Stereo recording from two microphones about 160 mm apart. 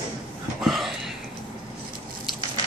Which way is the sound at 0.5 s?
Centre (ahead or behind).